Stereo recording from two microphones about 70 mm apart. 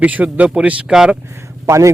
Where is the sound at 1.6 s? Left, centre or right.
Right.